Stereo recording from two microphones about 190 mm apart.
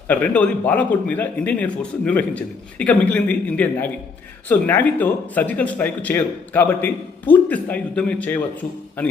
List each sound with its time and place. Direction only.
0.1 s speech: 10° left (ahead or behind)